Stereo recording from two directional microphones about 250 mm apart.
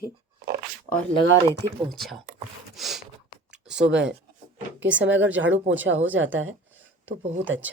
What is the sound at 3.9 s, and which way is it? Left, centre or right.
Speech, centre.